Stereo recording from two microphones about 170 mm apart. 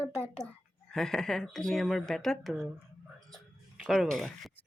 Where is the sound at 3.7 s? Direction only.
Centre (ahead or behind).